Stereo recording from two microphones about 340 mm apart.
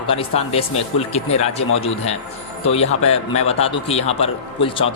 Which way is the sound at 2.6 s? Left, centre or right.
Centre.